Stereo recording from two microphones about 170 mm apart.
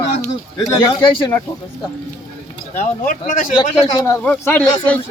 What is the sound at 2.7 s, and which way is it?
Speech, 50° left (ahead or behind).